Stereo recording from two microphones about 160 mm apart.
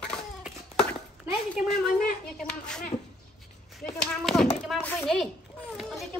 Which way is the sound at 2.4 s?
5° left (ahead or behind).